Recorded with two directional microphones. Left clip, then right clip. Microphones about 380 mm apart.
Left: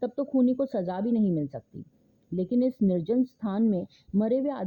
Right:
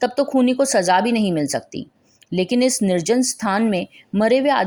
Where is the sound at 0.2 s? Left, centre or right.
Centre.